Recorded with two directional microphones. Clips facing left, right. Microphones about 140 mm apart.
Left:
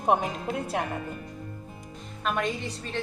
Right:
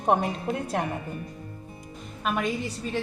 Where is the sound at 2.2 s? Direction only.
5° right (ahead or behind).